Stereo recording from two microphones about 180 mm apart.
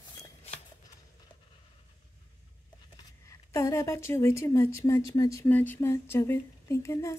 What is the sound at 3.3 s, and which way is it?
A woman's voice, 15° left (ahead or behind).